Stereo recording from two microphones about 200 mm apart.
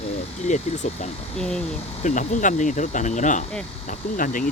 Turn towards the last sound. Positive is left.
turn(degrees=40)  # may be behind; listen again after turning